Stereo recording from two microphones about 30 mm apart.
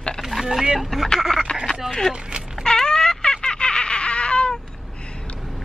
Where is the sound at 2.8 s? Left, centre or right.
Left.